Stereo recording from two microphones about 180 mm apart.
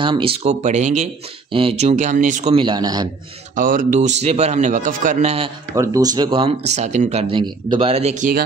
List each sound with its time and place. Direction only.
0.0 s speech: 30° right (ahead or behind); by 2.5 s 45° right (ahead or behind)
2.5 s speech: 25° right (ahead or behind)
3.5 s speech: 50° right (ahead or behind)
5.8 s speech: 20° right (ahead or behind); by 8.4 s 45° right (ahead or behind)